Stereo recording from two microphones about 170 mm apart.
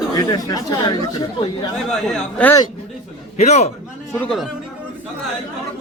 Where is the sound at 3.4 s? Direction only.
40° left (ahead or behind).